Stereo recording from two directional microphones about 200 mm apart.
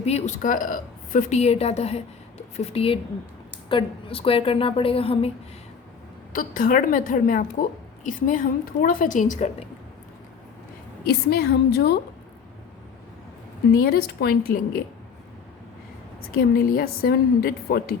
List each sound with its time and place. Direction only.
0.0 s a woman's voice: 35° left (ahead or behind)
6.3 s speech: 45° left (ahead or behind)
11.0 s speech: 50° left (ahead or behind)
13.7 s speech: 50° left (ahead or behind)
16.4 s speech: 50° left (ahead or behind)